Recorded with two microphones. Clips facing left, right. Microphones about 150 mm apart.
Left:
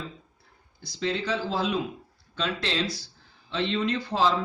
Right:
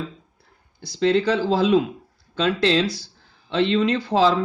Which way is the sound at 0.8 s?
80° right.